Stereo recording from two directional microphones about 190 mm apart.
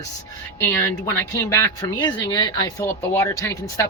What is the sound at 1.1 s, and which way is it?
Speech, 15° left (ahead or behind).